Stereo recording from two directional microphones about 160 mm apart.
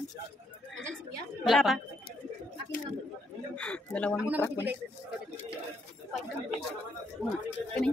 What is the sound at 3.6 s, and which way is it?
Speech, 10° left (ahead or behind).